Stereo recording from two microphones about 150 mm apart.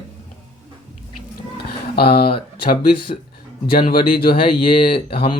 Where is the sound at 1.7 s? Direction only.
90° left.